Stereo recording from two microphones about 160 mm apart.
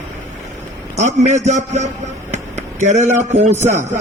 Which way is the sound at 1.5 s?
45° right (ahead or behind).